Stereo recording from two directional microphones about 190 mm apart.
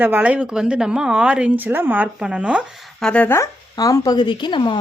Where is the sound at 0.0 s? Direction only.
10° right (ahead or behind).